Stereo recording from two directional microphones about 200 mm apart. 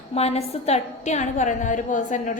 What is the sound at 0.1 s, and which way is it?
A woman's voice, 30° left (ahead or behind).